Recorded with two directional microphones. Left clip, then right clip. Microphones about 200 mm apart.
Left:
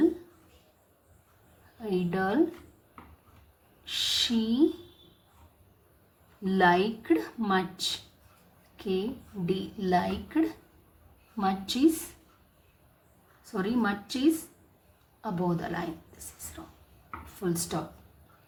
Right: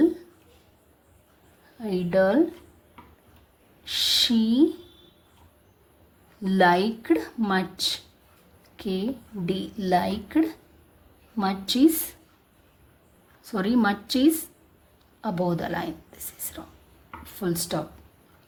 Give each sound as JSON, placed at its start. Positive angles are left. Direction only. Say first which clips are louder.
{"t": 1.8, "sound": "speech", "louder": "right 8 dB", "side_deg": -35}
{"t": 3.8, "sound": "speech", "louder": "right 6 dB", "side_deg": -30}
{"t": 6.4, "sound": "speech", "louder": "right 3 dB", "side_deg": -35}
{"t": 8.7, "sound": "a sound", "louder": "right 1 dB", "side_deg": -35}
{"t": 9.5, "sound": "speech", "louder": "right 4 dB", "side_deg": -35}
{"t": 13.5, "sound": "speech", "louder": "right 6 dB", "side_deg": -40}
{"t": 16.6, "sound": "a sound", "louder": "right 4 dB", "side_deg": -40}
{"t": 17.4, "sound": "speech", "louder": "right 4 dB", "side_deg": -40}